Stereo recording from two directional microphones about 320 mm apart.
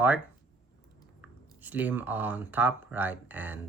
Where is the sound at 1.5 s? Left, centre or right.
Centre.